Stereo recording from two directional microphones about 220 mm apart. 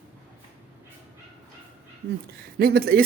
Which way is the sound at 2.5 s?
45° right (ahead or behind).